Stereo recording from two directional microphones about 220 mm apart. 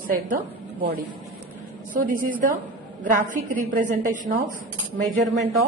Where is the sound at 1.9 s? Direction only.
40° right (ahead or behind).